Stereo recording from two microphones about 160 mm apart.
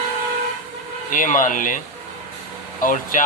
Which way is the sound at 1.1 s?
55° left (ahead or behind).